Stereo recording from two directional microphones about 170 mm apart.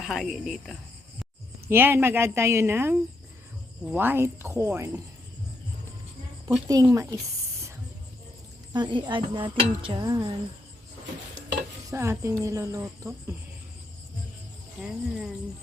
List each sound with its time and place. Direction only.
0.0 s speech: centre (ahead or behind)
1.6 s speech: 15° right (ahead or behind)
6.7 s a sound: 20° right (ahead or behind)
8.7 s a sound: 25° right (ahead or behind)
11.9 s speech: 15° right (ahead or behind)
14.8 s speech: 5° right (ahead or behind)